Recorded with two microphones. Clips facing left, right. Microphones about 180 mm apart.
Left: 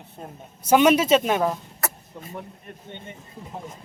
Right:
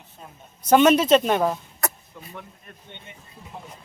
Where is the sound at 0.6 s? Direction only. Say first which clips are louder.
Right 1 dB; 10° left (ahead or behind).